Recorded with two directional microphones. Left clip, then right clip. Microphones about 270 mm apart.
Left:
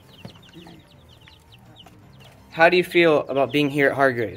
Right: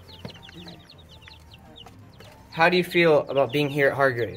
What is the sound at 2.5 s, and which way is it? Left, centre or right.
Speech, centre.